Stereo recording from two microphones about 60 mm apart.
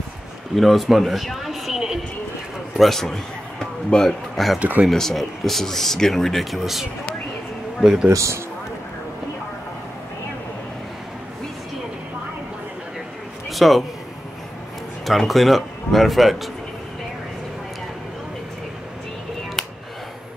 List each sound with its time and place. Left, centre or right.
0.6 s speech: centre
2.8 s a man's voice: centre
4.6 s speech: right
4.9 s speech: centre
8.1 s a man's voice: right
13.5 s speech: centre
15.0 s speech: centre
19.6 s a sound: centre